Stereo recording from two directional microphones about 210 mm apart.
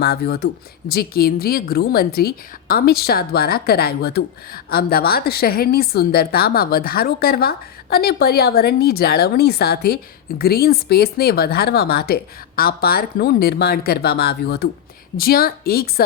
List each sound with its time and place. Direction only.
0.0 s a woman's voice: 50° left (ahead or behind)